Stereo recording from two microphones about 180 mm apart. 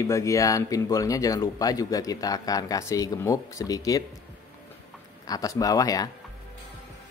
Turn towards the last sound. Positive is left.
turn(degrees=20)  # may be behind; listen again after turning